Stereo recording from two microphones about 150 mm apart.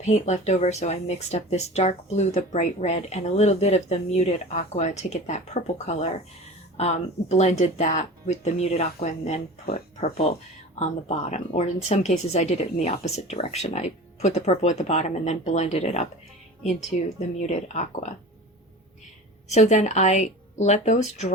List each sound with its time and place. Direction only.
0.0 s speech: 50° left (ahead or behind)
11.3 s speech: 50° left (ahead or behind)
17.2 s speech: 50° left (ahead or behind)
19.5 s speech: 50° left (ahead or behind)